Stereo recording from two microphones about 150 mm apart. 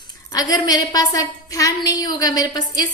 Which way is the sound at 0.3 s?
25° left (ahead or behind).